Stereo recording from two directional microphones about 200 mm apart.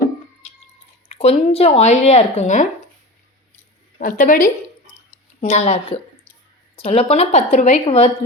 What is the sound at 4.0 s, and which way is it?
A woman's voice, 40° left (ahead or behind).